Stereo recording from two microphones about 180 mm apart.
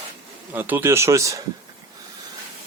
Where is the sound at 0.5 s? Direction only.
10° right (ahead or behind).